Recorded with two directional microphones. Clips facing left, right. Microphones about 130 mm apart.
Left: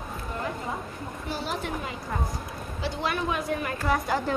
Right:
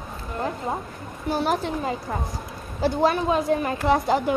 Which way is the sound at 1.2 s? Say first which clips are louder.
Right 9 dB; 50° right (ahead or behind).